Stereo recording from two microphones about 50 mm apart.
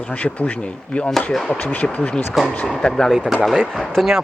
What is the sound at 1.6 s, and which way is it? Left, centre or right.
Speech, left.